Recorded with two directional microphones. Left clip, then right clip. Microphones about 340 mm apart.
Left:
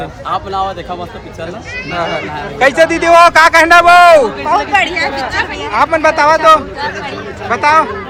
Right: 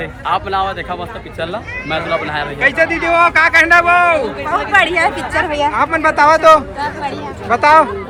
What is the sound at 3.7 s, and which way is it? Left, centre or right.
Speech, centre.